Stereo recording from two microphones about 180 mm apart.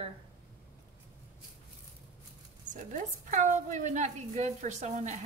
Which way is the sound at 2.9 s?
45° right (ahead or behind).